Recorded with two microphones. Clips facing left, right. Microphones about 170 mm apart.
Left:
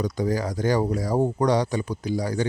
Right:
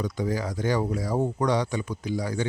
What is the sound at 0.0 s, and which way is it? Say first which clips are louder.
Speech: left 3 dB; 40° left (ahead or behind).